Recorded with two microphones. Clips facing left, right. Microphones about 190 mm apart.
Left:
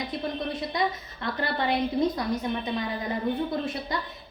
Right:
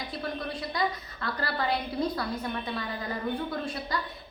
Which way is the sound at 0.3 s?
20° left (ahead or behind).